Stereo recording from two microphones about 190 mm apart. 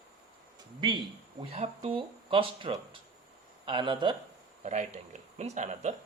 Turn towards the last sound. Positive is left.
turn(degrees=-40)  # may be behind; listen again after turning